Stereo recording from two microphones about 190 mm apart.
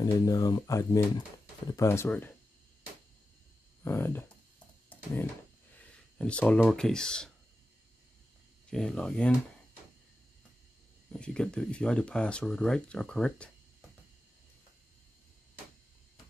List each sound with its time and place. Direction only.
0.0 s speech: 20° left (ahead or behind)
3.8 s speech: 10° left (ahead or behind)
4.8 s a sound: 10° left (ahead or behind)
6.1 s speech: 5° left (ahead or behind)
8.6 s speech: 5° left (ahead or behind)
11.1 s speech: 5° left (ahead or behind)